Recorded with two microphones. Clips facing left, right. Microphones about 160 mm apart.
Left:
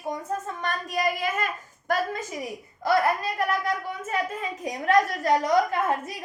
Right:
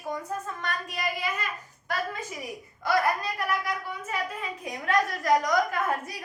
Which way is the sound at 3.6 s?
45° left (ahead or behind).